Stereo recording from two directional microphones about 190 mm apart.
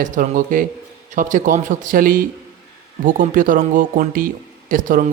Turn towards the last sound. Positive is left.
turn(degrees=-45)  # may be behind; listen again after turning